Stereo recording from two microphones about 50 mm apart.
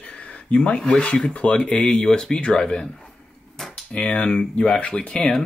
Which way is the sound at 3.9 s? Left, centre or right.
Left.